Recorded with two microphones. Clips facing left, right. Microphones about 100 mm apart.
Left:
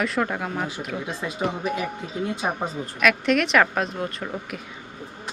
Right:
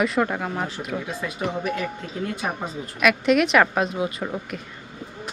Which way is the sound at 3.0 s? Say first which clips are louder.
Right 2 dB; centre (ahead or behind).